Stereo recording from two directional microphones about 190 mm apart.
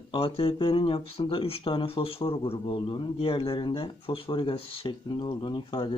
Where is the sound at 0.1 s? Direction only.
30° left (ahead or behind).